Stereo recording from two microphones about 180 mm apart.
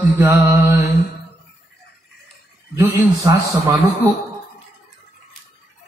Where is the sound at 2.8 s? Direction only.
20° right (ahead or behind).